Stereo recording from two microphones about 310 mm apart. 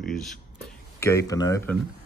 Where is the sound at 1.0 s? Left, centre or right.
Centre.